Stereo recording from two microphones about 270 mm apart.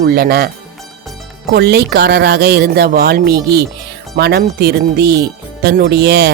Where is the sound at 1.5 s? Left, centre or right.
Right.